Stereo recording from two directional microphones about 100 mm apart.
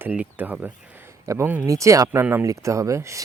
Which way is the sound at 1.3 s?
30° right (ahead or behind).